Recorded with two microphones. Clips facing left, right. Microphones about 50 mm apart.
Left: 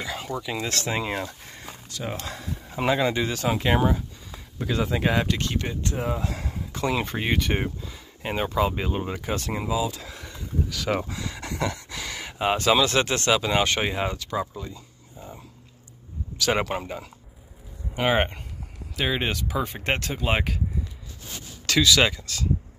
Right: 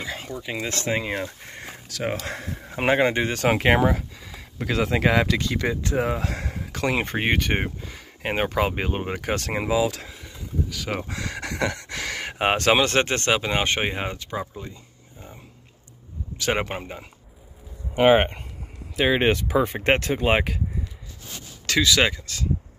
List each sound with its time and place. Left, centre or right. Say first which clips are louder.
0.0 s a sound: even; centre
0.4 s speech: even; centre
2.0 s speech: right 4 dB; right
3.4 s speech: right 4 dB; right
5.9 s speech: right 4 dB; right
6.9 s speech: right 3 dB; right
9.2 s speech: right 3 dB; right
10.1 s a sound: even; centre
11.1 s speech: right 3 dB; right
14.6 s a sound: left 1 dB; right
16.3 s speech: left 1 dB; right
16.7 s speech: left 3 dB; centre
21.6 s speech: even; centre